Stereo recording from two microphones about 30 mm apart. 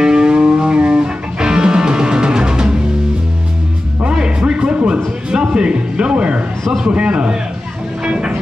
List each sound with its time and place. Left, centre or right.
0.0 s music: right
4.4 s music: right
4.8 s a sound: right
6.9 s a man's voice: right
8.0 s music: right